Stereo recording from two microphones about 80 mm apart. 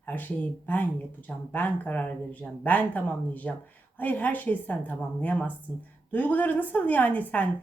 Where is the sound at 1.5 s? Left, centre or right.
Left.